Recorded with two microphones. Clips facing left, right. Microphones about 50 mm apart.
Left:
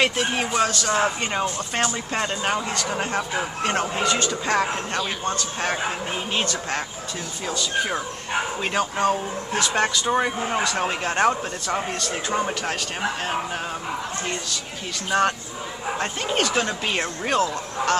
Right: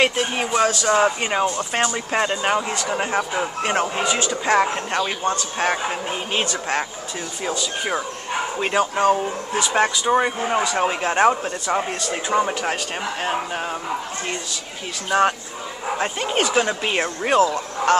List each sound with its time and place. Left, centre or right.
0.0 s speech: centre
4.3 s a woman's voice: centre
6.3 s speech: centre
15.0 s speech: centre